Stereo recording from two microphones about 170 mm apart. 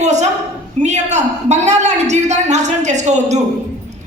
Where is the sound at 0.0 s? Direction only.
45° right (ahead or behind).